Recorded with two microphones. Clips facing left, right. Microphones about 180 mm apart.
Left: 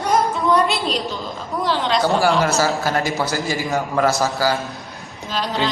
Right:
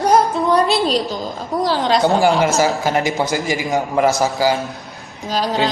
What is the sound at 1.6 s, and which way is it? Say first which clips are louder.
Speech: right 3 dB; 35° right (ahead or behind).